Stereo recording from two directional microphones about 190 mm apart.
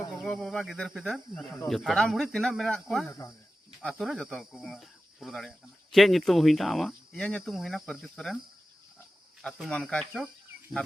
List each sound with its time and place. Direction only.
0.2 s speech: centre (ahead or behind)
3.1 s speech: 15° left (ahead or behind)
3.8 s speech: centre (ahead or behind)
9.4 s speech: centre (ahead or behind)